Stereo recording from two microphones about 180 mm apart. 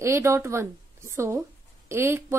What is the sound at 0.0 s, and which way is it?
A woman's voice, 15° right (ahead or behind).